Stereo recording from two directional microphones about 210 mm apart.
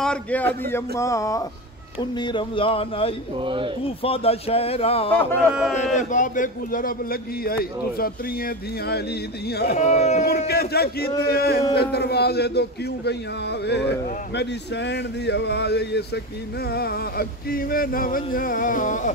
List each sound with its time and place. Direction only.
0.0 s a man's voice: 5° left (ahead or behind); by 3.2 s 25° left (ahead or behind)
3.3 s speech: 25° right (ahead or behind)
4.0 s speech: 25° left (ahead or behind)
5.5 s speech: 5° right (ahead or behind)
5.9 s a man's voice: 35° left (ahead or behind)
9.8 s a man's voice: 35° left (ahead or behind)
10.2 s a man's voice: 50° left (ahead or behind)